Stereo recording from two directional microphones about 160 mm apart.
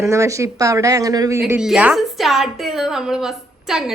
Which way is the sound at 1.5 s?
5° right (ahead or behind).